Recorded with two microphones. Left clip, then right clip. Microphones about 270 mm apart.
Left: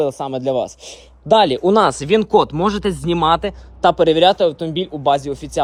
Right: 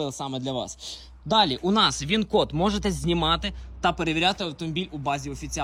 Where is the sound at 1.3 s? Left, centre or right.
Right.